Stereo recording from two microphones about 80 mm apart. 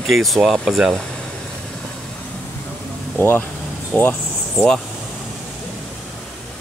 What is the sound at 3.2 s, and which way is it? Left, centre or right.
Speech, left.